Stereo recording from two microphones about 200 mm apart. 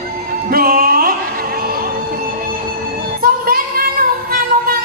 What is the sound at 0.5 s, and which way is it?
Music, 50° right (ahead or behind).